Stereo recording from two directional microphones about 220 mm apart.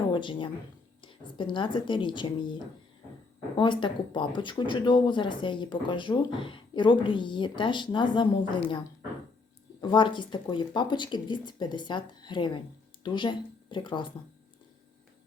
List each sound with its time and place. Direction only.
0.1 s speech: 20° left (ahead or behind)
3.6 s speech: 20° left (ahead or behind)
9.8 s speech: 20° left (ahead or behind)